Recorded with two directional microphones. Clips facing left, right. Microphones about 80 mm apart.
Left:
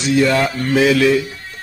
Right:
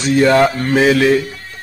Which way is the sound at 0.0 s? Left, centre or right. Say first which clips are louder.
Right 4 dB; right.